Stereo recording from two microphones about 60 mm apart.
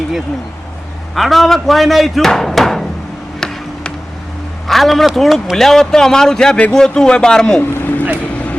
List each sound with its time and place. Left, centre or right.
1.1 s speech: centre
4.7 s a man's voice: centre
7.6 s vehicle: left